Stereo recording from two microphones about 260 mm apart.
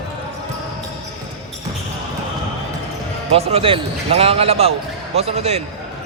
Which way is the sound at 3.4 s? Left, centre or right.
Right.